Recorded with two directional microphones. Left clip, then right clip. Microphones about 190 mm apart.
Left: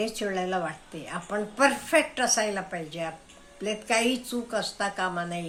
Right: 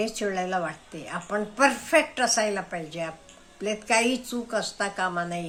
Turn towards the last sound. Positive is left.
turn(degrees=-10)  # may be behind; listen again after turning